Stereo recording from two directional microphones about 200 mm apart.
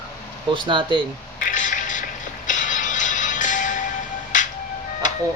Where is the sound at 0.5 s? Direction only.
25° right (ahead or behind).